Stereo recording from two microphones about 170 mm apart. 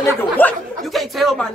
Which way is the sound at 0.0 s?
10° left (ahead or behind).